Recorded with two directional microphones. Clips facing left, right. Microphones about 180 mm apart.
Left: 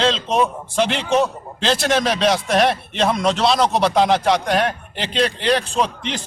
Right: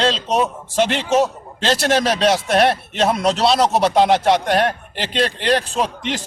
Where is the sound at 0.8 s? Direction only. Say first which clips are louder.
Right 1 dB; centre (ahead or behind).